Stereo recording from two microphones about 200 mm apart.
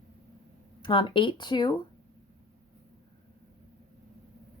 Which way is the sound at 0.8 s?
25° left (ahead or behind).